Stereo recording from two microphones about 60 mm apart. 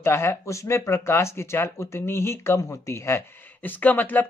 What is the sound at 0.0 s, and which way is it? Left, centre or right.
Speech, left.